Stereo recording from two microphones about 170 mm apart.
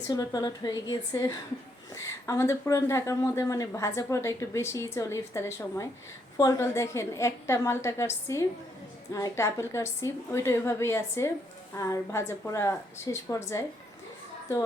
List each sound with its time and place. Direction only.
0.1 s a woman's voice: 20° left (ahead or behind)